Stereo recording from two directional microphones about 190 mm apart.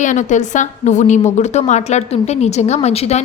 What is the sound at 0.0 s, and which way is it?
A woman's voice, 40° left (ahead or behind).